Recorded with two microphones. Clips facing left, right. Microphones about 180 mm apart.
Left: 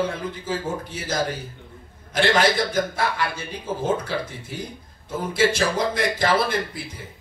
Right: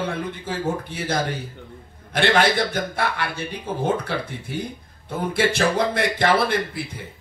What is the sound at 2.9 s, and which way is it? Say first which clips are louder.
Speech: even; 60° right (ahead or behind).